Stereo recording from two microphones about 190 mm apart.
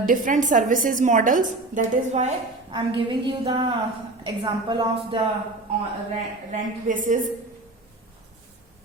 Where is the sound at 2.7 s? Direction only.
25° right (ahead or behind).